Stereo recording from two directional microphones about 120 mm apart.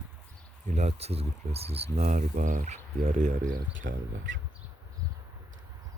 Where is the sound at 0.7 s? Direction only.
70° right (ahead or behind).